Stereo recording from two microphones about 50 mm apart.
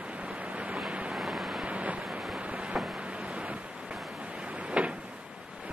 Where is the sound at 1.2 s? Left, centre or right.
Centre.